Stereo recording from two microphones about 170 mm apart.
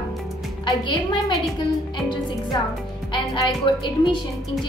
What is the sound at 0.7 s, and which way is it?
Speech, 25° left (ahead or behind).